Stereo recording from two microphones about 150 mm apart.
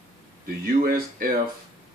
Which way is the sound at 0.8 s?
75° right (ahead or behind).